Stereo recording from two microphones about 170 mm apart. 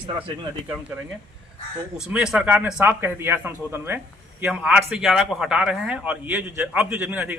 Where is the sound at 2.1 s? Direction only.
5° right (ahead or behind).